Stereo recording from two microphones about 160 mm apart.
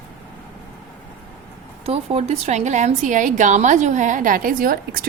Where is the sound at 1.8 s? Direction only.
40° right (ahead or behind).